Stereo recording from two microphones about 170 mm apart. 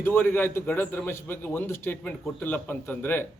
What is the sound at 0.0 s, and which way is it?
A man's voice, 10° left (ahead or behind).